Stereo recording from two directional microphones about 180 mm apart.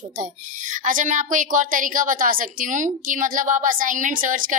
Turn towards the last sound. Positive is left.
turn(degrees=-50)  # may be behind; listen again after turning